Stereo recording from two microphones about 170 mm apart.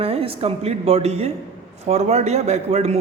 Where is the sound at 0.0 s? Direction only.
35° right (ahead or behind).